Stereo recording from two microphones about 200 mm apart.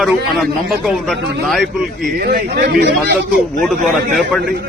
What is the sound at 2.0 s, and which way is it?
Speech, 50° right (ahead or behind).